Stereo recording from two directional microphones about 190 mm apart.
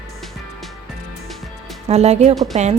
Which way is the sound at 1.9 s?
35° right (ahead or behind).